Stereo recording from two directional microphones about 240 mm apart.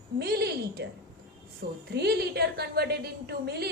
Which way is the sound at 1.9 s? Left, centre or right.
Right.